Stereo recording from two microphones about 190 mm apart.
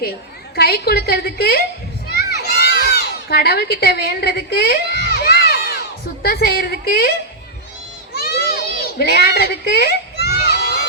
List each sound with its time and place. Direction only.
0.5 s a woman's voice: 55° left (ahead or behind)
2.3 s crowd: 55° left (ahead or behind)
6.2 s a woman's voice: 55° left (ahead or behind)
8.1 s children playing: 55° left (ahead or behind)
10.6 s crowd: 60° left (ahead or behind)